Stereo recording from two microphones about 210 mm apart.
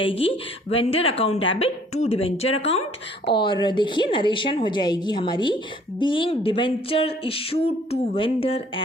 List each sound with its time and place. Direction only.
0.0 s speech: 25° left (ahead or behind)